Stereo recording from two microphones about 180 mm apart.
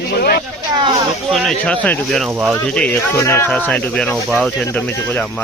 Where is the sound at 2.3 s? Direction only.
10° right (ahead or behind).